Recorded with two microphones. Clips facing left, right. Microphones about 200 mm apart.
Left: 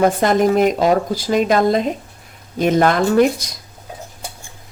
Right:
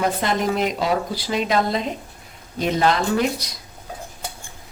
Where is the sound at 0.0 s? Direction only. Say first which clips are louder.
Left 7 dB; 50° left (ahead or behind).